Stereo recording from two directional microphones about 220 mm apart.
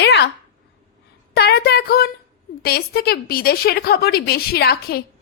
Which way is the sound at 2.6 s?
45° left (ahead or behind).